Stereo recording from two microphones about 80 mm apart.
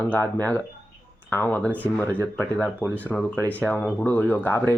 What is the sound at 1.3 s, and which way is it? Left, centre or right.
Speech, left.